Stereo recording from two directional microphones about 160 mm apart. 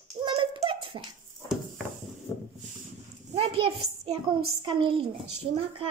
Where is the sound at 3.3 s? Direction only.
40° right (ahead or behind).